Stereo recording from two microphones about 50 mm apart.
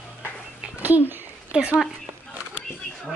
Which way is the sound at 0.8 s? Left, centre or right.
Right.